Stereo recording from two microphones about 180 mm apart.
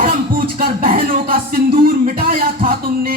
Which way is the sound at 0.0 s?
55° right (ahead or behind).